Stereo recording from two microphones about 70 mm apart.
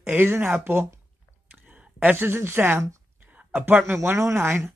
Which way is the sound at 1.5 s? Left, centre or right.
Right.